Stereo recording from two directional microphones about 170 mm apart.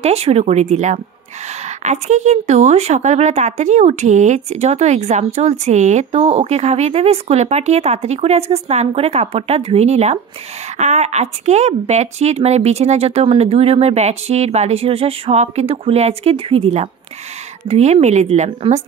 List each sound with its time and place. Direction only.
0.0 s speech: 35° right (ahead or behind)